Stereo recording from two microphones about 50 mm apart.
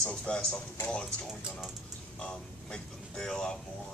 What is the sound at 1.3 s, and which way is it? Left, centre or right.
Speech, centre.